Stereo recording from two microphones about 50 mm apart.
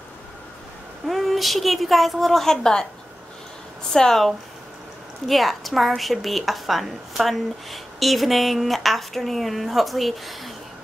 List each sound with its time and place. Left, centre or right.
1.0 s a woman's voice: centre
3.9 s speech: centre
5.3 s a woman's voice: centre